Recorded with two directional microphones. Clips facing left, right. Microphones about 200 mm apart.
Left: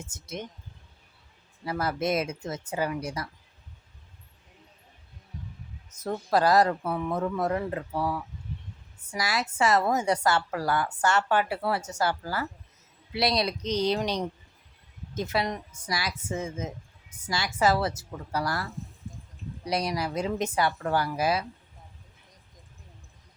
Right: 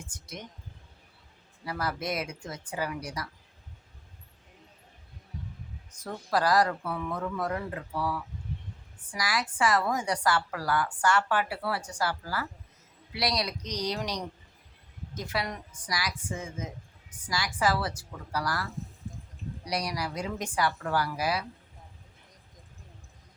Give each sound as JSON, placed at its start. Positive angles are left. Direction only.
{"t": 0.0, "sound": "a woman's voice", "side_deg": 25}
{"t": 1.6, "sound": "a woman's voice", "side_deg": 25}
{"t": 5.9, "sound": "a woman's voice", "side_deg": 25}
{"t": 18.7, "sound": "a sound", "side_deg": 0}
{"t": 19.6, "sound": "a woman's voice", "side_deg": 25}